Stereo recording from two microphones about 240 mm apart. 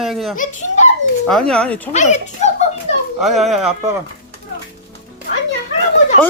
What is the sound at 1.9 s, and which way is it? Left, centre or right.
Speech, left.